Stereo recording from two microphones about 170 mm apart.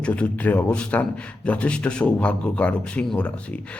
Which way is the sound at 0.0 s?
10° left (ahead or behind).